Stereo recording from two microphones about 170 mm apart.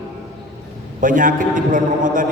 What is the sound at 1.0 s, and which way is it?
A man's voice, 50° right (ahead or behind).